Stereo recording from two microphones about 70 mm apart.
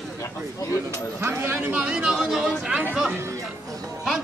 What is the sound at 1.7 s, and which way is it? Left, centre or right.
Speech, centre.